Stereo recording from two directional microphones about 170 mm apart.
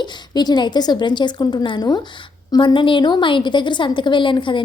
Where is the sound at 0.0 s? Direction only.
25° left (ahead or behind).